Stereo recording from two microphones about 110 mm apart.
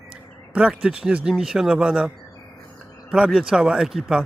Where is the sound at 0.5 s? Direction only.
5° right (ahead or behind).